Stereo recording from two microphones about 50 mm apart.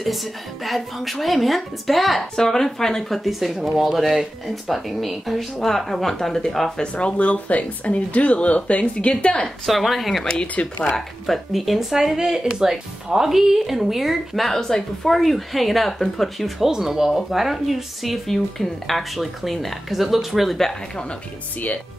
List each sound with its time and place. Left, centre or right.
0.0 s speech: centre
3.3 s speech: centre
6.8 s speech: left
9.7 s speech: centre
10.4 s speech: left
11.0 s speech: centre